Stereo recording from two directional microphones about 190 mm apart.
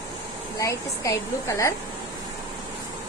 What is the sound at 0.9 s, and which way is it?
Speech, 15° left (ahead or behind).